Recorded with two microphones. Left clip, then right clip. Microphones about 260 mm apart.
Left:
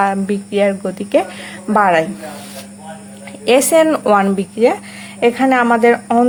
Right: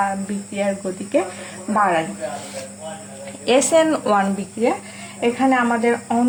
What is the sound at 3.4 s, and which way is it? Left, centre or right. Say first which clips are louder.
A woman's voice: left 4 dB; left.